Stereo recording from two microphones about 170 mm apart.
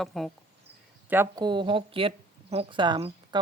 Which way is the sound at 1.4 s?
30° right (ahead or behind).